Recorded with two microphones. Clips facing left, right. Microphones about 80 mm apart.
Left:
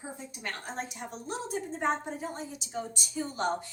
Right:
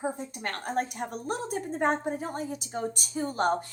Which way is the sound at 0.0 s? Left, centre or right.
Right.